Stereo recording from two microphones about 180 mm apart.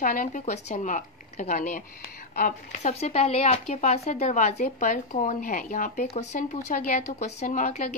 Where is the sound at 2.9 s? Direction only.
35° left (ahead or behind).